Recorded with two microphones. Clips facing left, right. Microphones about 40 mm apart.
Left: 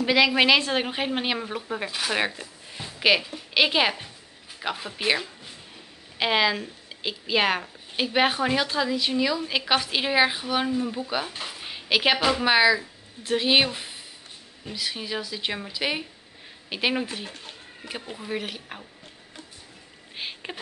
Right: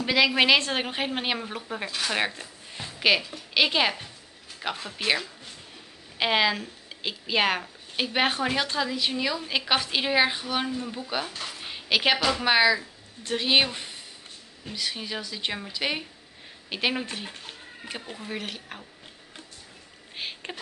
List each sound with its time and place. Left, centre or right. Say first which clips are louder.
0.0 s speech: left 2 dB; centre
6.1 s speech: left 1 dB; centre
11.3 s dog: left 1 dB; centre
12.2 s speech: left 2 dB; centre
20.2 s a sound: left 1 dB; centre